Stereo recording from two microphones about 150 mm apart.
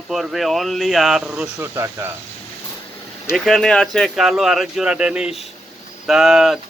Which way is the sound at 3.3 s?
Centre (ahead or behind).